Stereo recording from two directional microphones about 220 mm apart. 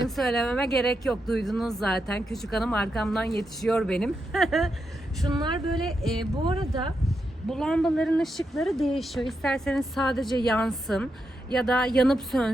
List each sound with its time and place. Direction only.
0.2 s speech: centre (ahead or behind)
5.2 s speech: 20° right (ahead or behind)
5.7 s speech: centre (ahead or behind)
6.3 s speech: 20° right (ahead or behind)
7.1 s speech: centre (ahead or behind)